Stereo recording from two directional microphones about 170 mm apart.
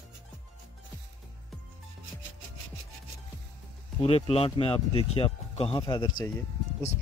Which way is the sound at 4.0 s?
35° left (ahead or behind).